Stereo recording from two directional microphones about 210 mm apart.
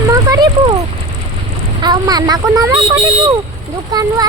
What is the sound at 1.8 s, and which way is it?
Speech, 20° right (ahead or behind).